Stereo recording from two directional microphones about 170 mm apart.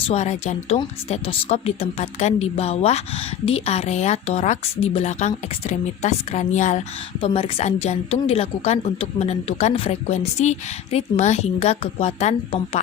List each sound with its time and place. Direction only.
0.1 s a woman's voice: 40° left (ahead or behind)